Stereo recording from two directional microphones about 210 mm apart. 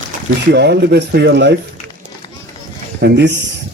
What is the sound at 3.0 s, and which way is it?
Speech, 55° right (ahead or behind).